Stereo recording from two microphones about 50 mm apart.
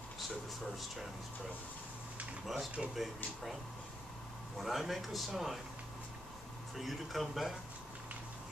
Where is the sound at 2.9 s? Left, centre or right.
Centre.